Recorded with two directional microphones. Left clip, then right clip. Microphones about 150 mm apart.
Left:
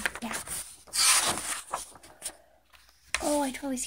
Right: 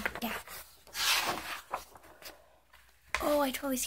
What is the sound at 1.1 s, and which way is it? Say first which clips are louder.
Rub: left 1 dB; 45° left (ahead or behind).